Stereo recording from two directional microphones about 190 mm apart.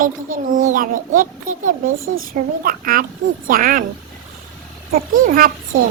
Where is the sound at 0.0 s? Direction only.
45° right (ahead or behind).